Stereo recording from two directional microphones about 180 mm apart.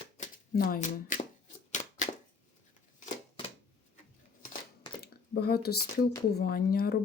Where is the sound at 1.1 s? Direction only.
45° left (ahead or behind).